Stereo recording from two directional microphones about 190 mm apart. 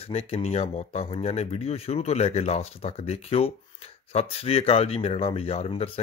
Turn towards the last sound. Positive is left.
turn(degrees=30)  # may be behind; listen again after turning